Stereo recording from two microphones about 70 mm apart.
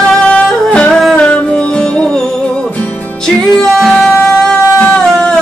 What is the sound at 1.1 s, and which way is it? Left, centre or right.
Music, centre.